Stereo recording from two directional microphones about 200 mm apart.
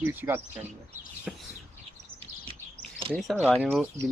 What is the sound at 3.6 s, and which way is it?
Speech, 5° right (ahead or behind).